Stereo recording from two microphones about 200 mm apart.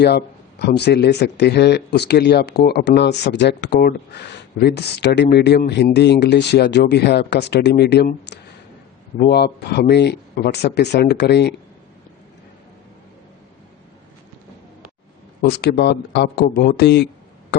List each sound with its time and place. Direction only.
0.0 s speech: 55° left (ahead or behind)
15.4 s speech: 55° left (ahead or behind)